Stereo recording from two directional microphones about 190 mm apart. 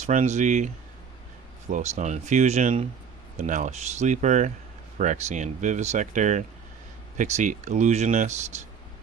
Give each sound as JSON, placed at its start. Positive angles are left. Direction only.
{"t": 0.0, "sound": "speech", "side_deg": -40}
{"t": 1.7, "sound": "speech", "side_deg": -40}